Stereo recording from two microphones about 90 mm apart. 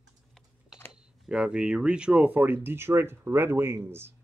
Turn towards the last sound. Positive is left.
turn(degrees=-25)  # may be behind; listen again after turning